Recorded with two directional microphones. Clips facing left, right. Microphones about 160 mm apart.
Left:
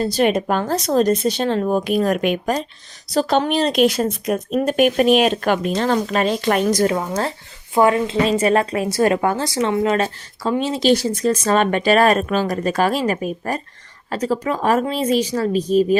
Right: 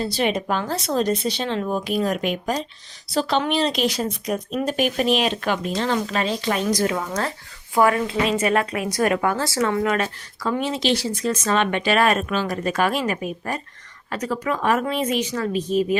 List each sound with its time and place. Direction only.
0.0 s speech: 45° left (ahead or behind)
3.1 s speech: 45° left (ahead or behind)
6.9 s speech: 30° left (ahead or behind)